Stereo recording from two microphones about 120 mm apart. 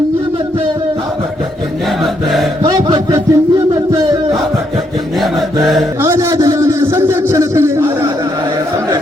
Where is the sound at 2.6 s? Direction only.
40° right (ahead or behind).